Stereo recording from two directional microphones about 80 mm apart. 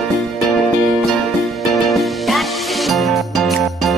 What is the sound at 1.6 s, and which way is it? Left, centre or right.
Music, centre.